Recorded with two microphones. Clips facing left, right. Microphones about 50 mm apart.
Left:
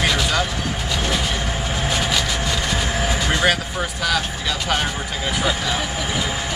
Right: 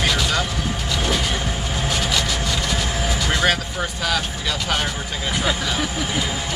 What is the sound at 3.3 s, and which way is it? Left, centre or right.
Speech, centre.